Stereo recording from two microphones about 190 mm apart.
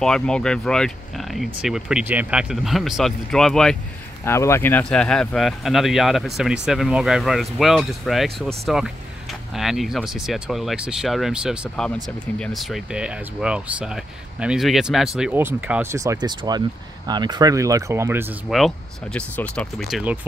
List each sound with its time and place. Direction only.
0.0 s speech: 5° left (ahead or behind)
4.2 s speech: 15° left (ahead or behind); by 18.2 s 15° right (ahead or behind)
18.5 s speech: centre (ahead or behind)